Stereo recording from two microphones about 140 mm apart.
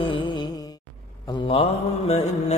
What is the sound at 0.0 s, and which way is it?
Music, 35° left (ahead or behind).